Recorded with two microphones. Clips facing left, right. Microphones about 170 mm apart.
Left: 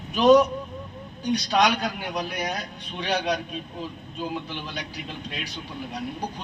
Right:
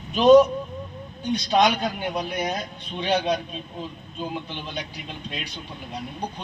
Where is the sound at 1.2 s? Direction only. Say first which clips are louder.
Right 2 dB; 20° right (ahead or behind).